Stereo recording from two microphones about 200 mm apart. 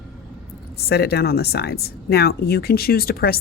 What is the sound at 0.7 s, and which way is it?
Speech, 55° left (ahead or behind).